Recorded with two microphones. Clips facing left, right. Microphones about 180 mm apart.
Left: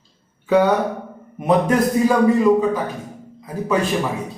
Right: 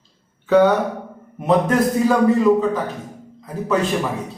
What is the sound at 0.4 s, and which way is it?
Speech, 10° left (ahead or behind).